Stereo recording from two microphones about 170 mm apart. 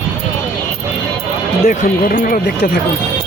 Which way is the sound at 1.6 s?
50° left (ahead or behind).